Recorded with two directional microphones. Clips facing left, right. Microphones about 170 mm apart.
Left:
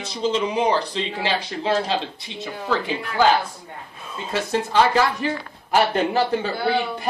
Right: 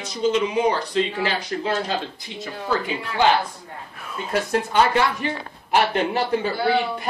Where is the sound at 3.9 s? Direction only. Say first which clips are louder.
Right 2 dB; 20° left (ahead or behind).